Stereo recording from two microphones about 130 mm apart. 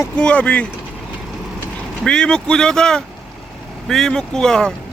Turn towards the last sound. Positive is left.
turn(degrees=5)  # may be behind; listen again after turning